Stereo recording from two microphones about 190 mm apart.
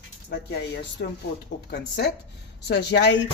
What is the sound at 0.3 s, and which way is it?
Speech, 60° left (ahead or behind).